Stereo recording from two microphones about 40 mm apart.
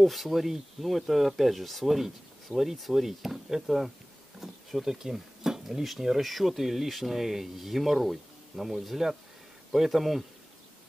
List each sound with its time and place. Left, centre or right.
0.0 s speech: centre